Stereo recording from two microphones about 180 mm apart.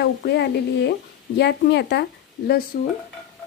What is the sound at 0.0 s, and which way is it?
Speech, 70° left (ahead or behind).